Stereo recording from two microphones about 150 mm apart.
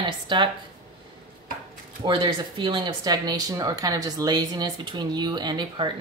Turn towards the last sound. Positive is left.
turn(degrees=-30)  # may be behind; listen again after turning